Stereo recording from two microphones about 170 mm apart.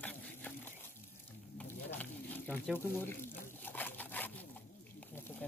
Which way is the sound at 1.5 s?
10° left (ahead or behind).